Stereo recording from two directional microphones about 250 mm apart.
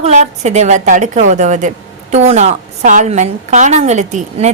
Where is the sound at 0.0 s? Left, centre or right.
Right.